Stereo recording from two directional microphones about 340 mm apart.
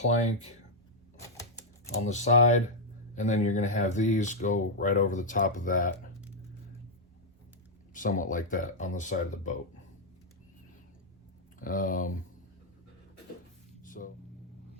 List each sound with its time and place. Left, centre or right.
0.0 s speech: centre
2.0 s speech: left
7.9 s speech: left
11.6 s speech: left
13.8 s vehicle: left